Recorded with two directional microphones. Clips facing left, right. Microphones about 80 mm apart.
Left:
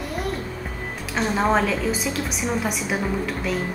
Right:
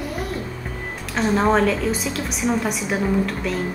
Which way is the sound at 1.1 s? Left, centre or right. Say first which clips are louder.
Right 2 dB; centre.